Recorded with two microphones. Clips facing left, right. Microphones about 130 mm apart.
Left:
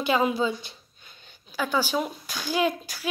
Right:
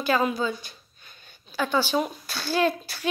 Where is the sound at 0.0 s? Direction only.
20° left (ahead or behind).